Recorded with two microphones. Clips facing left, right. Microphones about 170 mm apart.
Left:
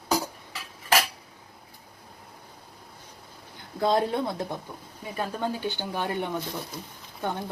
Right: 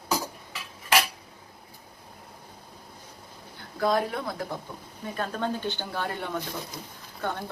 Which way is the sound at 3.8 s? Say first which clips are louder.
Left 2 dB; 25° left (ahead or behind).